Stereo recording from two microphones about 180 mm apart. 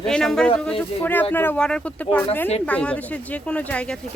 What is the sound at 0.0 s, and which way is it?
Speech, 5° left (ahead or behind).